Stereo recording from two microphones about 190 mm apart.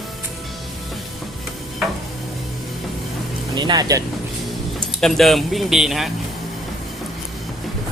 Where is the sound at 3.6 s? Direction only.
20° right (ahead or behind).